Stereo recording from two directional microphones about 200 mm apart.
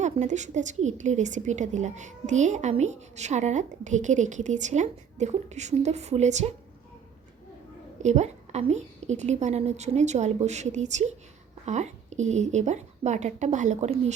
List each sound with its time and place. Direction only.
0.0 s a woman's voice: 35° right (ahead or behind)
8.0 s a woman's voice: 35° right (ahead or behind)